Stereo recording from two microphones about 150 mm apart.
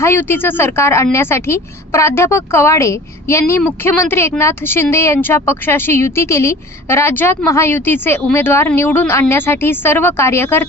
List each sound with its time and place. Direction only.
0.0 s speech: 15° left (ahead or behind)